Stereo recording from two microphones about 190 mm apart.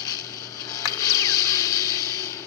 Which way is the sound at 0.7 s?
20° left (ahead or behind).